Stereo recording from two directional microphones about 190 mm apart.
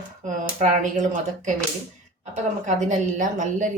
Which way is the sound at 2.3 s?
40° right (ahead or behind).